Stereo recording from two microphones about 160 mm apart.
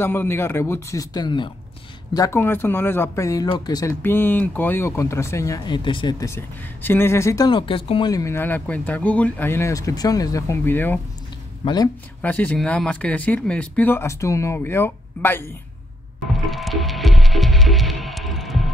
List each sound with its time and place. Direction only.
0.0 s speech: 15° left (ahead or behind); by 8.1 s 35° left (ahead or behind)
8.1 s speech: 20° left (ahead or behind)
11.6 s speech: 25° left (ahead or behind)
12.2 s speech: 10° left (ahead or behind)
16.3 s music: centre (ahead or behind)